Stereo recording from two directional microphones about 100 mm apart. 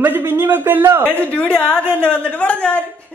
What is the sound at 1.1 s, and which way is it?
Speech, 15° left (ahead or behind).